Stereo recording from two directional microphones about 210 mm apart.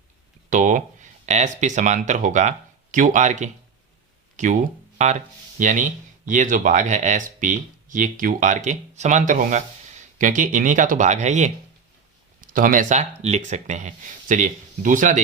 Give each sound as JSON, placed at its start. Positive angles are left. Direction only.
{"t": 0.5, "sound": "speech", "side_deg": -35}